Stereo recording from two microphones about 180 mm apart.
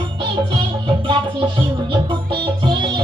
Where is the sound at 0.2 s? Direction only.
25° right (ahead or behind).